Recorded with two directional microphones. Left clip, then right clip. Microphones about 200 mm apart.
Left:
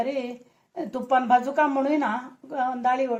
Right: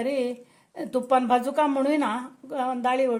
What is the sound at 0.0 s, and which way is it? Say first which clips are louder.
A woman's voice: right 1 dB; 60° right (ahead or behind).